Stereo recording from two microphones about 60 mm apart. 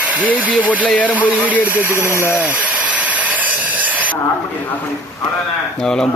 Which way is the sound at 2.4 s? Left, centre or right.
Right.